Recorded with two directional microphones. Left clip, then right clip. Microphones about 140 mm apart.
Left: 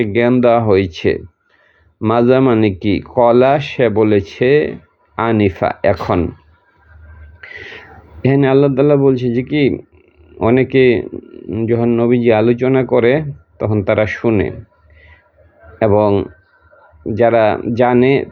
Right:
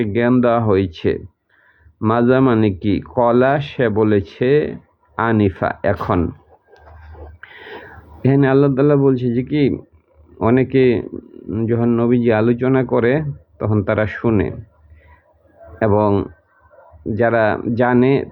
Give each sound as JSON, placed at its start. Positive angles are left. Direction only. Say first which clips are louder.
{"t": 0.0, "sound": "speech", "louder": "left 4 dB", "side_deg": 20}
{"t": 7.4, "sound": "speech", "louder": "left 4 dB", "side_deg": 15}
{"t": 15.8, "sound": "speech", "louder": "left 3 dB", "side_deg": 10}